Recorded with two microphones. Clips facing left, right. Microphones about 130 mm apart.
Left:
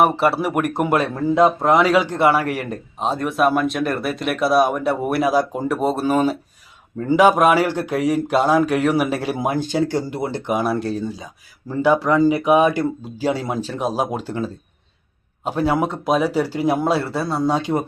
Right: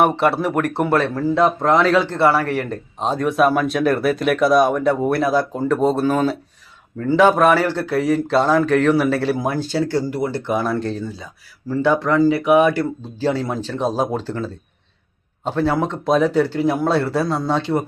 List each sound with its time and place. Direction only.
0.0 s speech: centre (ahead or behind); by 17.8 s 15° left (ahead or behind)